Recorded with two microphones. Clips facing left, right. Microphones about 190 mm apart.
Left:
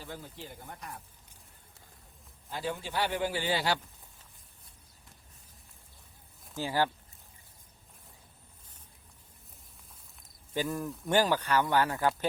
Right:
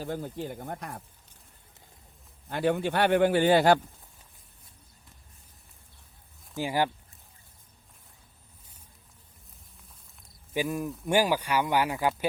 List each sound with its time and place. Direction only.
0.0 s speech: 45° right (ahead or behind)
2.5 s a man's voice: 60° right (ahead or behind)
6.6 s speech: 15° right (ahead or behind)
10.5 s speech: 15° right (ahead or behind)